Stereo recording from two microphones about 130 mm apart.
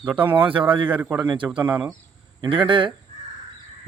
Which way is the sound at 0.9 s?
15° right (ahead or behind).